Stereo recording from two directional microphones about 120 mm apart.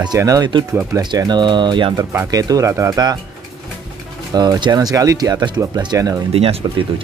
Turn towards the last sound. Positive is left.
turn(degrees=-55)  # may be behind; listen again after turning